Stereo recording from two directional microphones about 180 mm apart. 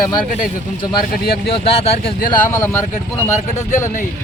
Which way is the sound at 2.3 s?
15° left (ahead or behind).